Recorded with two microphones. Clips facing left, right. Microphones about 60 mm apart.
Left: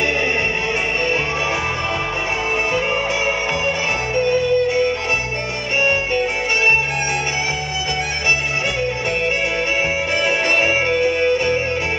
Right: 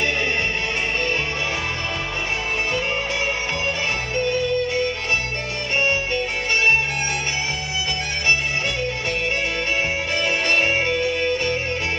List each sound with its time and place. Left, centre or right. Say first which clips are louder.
5.8 s music: left 4 dB; centre
10.1 s music: left 2 dB; centre